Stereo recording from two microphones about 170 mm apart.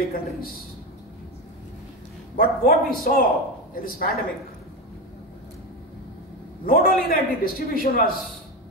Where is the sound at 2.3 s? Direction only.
60° left (ahead or behind).